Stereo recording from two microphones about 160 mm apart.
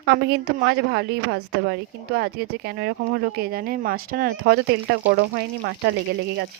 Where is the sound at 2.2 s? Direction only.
80° right.